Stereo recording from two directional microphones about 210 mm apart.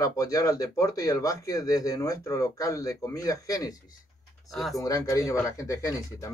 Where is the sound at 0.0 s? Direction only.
15° left (ahead or behind).